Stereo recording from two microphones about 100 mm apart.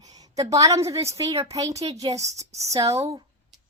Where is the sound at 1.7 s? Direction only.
90° right.